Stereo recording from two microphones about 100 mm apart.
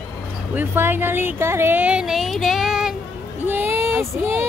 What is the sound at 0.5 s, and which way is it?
Speech, 20° right (ahead or behind).